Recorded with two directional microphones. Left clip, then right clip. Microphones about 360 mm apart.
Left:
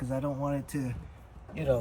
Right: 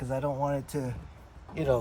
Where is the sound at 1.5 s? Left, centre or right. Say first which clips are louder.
Right 1 dB; centre.